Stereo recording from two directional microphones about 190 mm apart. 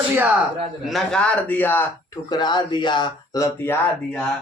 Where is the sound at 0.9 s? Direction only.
Centre (ahead or behind).